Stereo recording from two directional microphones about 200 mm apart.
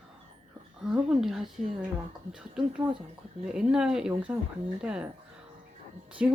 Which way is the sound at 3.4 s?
5° right (ahead or behind).